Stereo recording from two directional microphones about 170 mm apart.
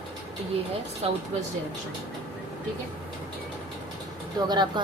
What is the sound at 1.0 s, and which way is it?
Speech, 35° right (ahead or behind).